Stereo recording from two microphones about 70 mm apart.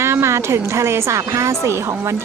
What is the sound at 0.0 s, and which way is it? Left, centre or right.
A woman's voice, right.